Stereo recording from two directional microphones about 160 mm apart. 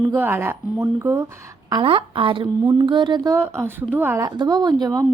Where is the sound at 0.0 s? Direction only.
15° right (ahead or behind).